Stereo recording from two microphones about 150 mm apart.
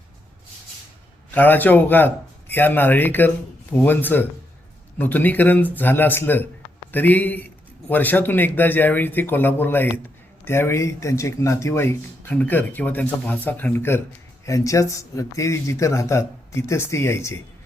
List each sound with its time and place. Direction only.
1.3 s speech: 10° left (ahead or behind)